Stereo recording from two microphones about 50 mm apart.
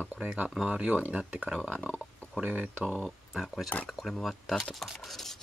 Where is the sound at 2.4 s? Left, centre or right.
Right.